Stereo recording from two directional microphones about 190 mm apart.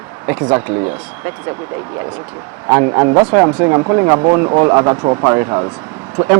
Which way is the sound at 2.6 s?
20° right (ahead or behind).